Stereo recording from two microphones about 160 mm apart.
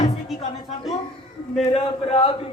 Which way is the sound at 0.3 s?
Centre (ahead or behind).